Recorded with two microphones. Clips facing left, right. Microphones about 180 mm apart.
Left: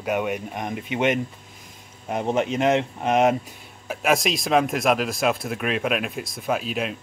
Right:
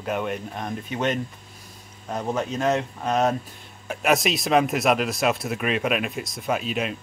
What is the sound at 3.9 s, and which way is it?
Speech, centre (ahead or behind).